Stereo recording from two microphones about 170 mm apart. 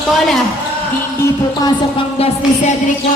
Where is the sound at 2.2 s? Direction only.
35° left (ahead or behind).